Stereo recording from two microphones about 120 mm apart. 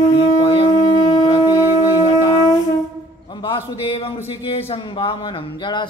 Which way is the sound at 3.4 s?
50° left (ahead or behind).